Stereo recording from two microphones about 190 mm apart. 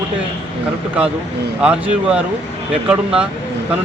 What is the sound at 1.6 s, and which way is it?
Speech, 5° right (ahead or behind).